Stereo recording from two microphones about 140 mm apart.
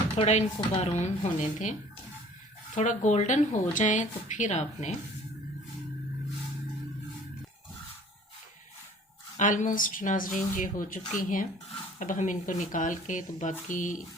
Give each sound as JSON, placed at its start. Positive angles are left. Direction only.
{"t": 0.2, "sound": "speech", "side_deg": 45}
{"t": 2.7, "sound": "speech", "side_deg": 60}
{"t": 9.4, "sound": "speech", "side_deg": 65}